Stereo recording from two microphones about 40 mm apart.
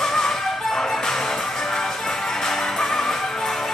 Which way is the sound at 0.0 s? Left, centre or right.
Centre.